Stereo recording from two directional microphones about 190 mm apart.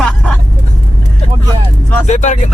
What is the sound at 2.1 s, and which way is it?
Speech, 40° left (ahead or behind).